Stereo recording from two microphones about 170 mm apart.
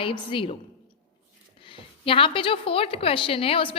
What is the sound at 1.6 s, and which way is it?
A woman's voice, 30° left (ahead or behind).